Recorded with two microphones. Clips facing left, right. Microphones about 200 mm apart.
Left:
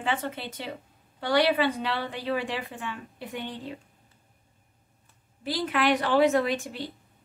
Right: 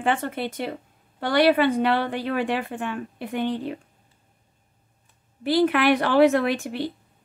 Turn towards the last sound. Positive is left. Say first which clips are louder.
# right 5 dB
turn(degrees=-65)  # may be behind; listen again after turning